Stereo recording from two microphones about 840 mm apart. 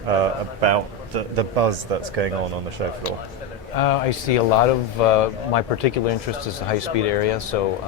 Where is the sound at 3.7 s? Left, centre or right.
Left.